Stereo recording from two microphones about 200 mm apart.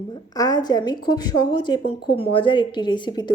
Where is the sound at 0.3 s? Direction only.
20° left (ahead or behind).